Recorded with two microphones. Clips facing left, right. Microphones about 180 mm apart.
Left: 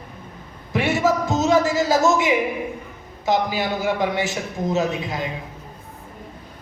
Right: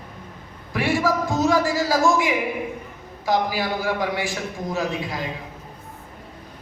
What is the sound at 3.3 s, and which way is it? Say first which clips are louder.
A man's voice: left 1 dB; 20° left (ahead or behind).